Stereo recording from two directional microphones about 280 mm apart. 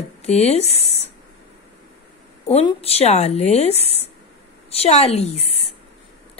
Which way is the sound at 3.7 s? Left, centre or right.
Right.